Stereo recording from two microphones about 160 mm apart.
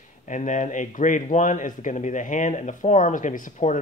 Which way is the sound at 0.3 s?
50° left (ahead or behind).